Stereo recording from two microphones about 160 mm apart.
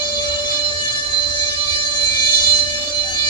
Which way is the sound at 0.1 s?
25° left (ahead or behind).